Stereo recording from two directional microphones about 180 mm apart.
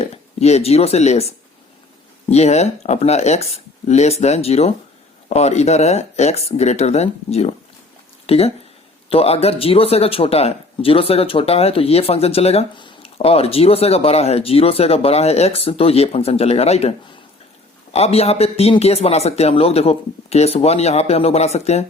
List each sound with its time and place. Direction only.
0.0 s speech: 35° left (ahead or behind)
2.3 s speech: 35° left (ahead or behind)
17.9 s speech: 35° left (ahead or behind)